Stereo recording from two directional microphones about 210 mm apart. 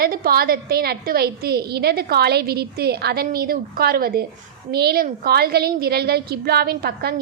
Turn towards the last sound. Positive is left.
turn(degrees=-50)  # may be behind; listen again after turning